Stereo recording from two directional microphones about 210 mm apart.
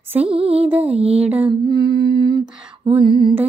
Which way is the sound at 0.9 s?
30° right (ahead or behind).